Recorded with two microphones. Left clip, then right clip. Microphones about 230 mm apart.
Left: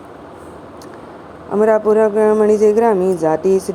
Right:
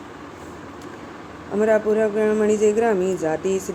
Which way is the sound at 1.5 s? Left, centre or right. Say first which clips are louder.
Left 6 dB; centre.